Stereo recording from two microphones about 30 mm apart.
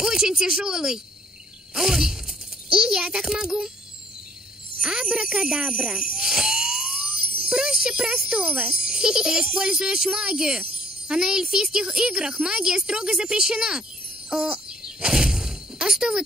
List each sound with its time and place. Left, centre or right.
0.0 s speech: right
4.7 s speech: right
6.1 s music: right
7.8 s speech: right
14.3 s a sound: right